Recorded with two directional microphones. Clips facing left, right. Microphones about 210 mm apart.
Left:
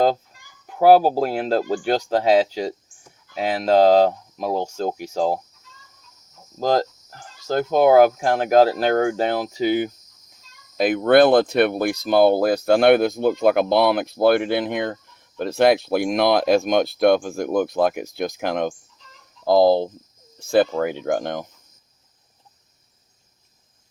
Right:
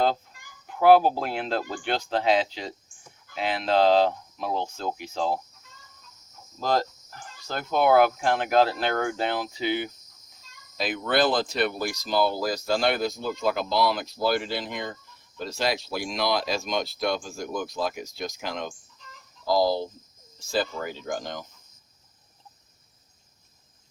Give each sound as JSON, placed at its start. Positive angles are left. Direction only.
{"t": 0.3, "sound": "a sound", "side_deg": -50}
{"t": 0.8, "sound": "speech", "side_deg": 40}
{"t": 6.6, "sound": "speech", "side_deg": 45}